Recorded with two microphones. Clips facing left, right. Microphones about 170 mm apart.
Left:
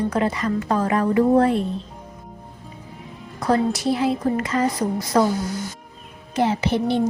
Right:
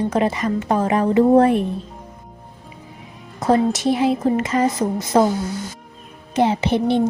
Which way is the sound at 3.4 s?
20° right (ahead or behind).